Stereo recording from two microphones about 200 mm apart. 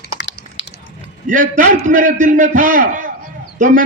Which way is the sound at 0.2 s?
70° left (ahead or behind).